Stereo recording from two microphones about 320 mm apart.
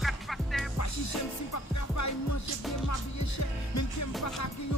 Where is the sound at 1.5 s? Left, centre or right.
Left.